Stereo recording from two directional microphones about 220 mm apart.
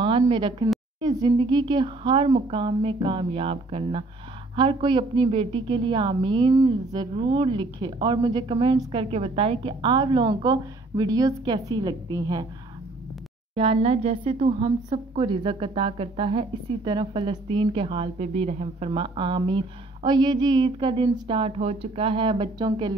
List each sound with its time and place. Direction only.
0.0 s speech: 20° right (ahead or behind)
13.6 s speech: 25° right (ahead or behind)